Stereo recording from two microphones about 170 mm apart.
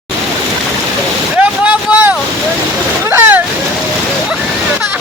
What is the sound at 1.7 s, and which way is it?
Vehicle, 10° right (ahead or behind).